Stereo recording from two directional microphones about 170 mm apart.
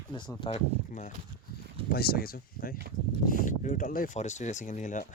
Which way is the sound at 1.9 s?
65° left (ahead or behind).